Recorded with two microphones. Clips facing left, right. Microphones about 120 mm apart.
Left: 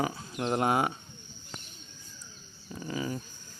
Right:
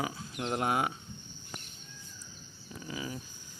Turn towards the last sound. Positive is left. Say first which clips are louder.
# left 5 dB
turn(degrees=-5)  # may be behind; listen again after turning